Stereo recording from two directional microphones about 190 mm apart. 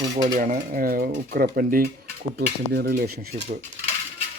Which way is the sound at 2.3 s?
60° right (ahead or behind).